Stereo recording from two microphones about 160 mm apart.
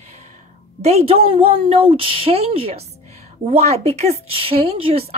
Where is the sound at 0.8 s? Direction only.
40° right (ahead or behind).